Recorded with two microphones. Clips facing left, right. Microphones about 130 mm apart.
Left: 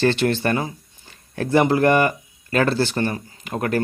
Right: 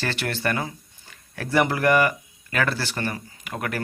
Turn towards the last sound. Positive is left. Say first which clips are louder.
# left 7 dB
turn(degrees=30)  # may be behind; listen again after turning